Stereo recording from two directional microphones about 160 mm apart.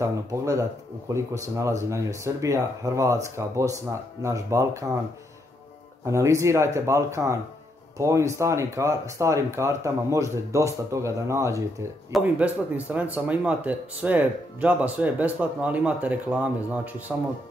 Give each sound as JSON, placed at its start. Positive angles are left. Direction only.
{"t": 0.0, "sound": "speech", "side_deg": -20}
{"t": 6.0, "sound": "speech", "side_deg": -20}